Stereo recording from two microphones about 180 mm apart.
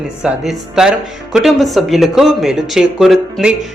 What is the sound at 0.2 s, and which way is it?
Speech, 5° right (ahead or behind).